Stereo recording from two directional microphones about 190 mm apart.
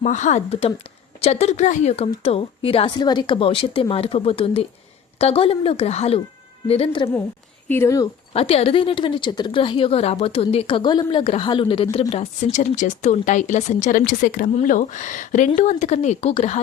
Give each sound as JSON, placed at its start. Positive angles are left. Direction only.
{"t": 0.0, "sound": "a woman's voice", "side_deg": 40}
{"t": 7.7, "sound": "speech", "side_deg": 15}
{"t": 8.3, "sound": "speech", "side_deg": 30}